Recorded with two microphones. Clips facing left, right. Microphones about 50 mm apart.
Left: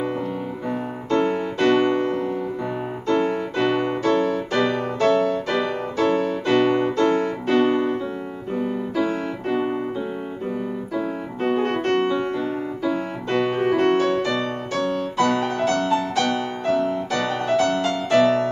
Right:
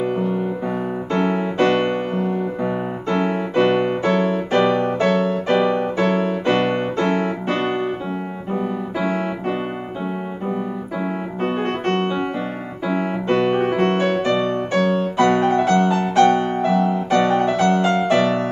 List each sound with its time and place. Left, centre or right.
0.0 s music: centre
1.1 s music: right
5.9 s piano: right
7.5 s piano: centre
8.9 s music: right
11.0 s piano: right
12.8 s music: right